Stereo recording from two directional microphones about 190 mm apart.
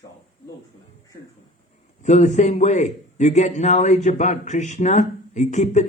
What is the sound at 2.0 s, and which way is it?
Speech, 40° left (ahead or behind).